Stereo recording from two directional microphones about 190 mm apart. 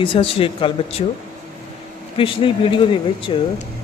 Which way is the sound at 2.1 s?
30° left (ahead or behind).